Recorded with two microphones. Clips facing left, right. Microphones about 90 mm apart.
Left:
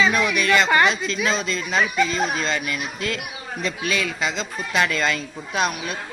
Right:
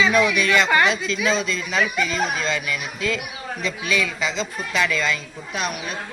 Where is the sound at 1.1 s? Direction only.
35° left (ahead or behind).